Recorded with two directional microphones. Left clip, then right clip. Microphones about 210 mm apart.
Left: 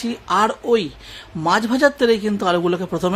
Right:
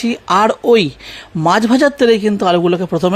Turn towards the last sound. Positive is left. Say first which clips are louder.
# right 6 dB
turn(degrees=-25)  # may be behind; listen again after turning